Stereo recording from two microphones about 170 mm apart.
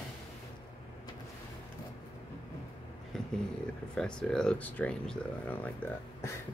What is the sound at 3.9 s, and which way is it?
Speech, 5° left (ahead or behind).